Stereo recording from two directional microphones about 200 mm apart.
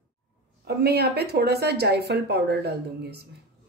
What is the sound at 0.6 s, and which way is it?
Speech, 55° right (ahead or behind).